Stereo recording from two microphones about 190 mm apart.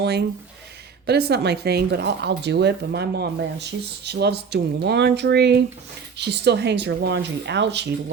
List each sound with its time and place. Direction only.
0.0 s speech: 60° right (ahead or behind)